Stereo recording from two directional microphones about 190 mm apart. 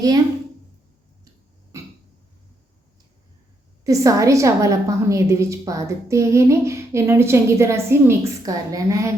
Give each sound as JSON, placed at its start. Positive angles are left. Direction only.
{"t": 1.7, "sound": "throat clearing", "side_deg": -15}
{"t": 3.8, "sound": "a woman's voice", "side_deg": -15}